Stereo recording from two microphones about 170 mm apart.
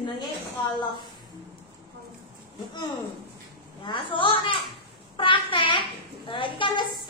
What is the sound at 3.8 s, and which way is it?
A woman's voice, 30° left (ahead or behind).